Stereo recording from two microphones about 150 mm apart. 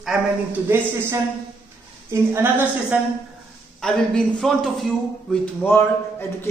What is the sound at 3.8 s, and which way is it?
A man's voice, 5° left (ahead or behind).